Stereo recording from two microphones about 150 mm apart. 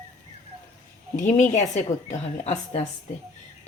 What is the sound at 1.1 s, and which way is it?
A woman's voice, 55° left (ahead or behind).